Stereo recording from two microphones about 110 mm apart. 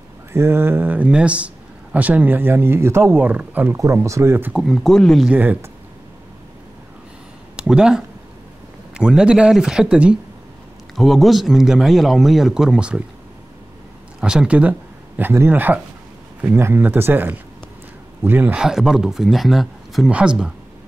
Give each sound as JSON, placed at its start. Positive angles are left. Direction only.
{"t": 0.3, "sound": "speech", "side_deg": -25}
{"t": 3.7, "sound": "speech", "side_deg": -30}
{"t": 4.6, "sound": "a man's voice", "side_deg": 0}
{"t": 5.3, "sound": "speech", "side_deg": -15}
{"t": 7.5, "sound": "a man's voice", "side_deg": -10}
{"t": 14.2, "sound": "speech", "side_deg": -10}
{"t": 18.6, "sound": "a man's voice", "side_deg": -5}